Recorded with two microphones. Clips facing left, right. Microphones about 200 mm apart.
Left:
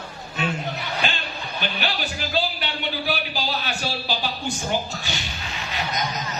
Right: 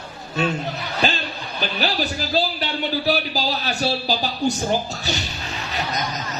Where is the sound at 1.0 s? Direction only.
35° right (ahead or behind).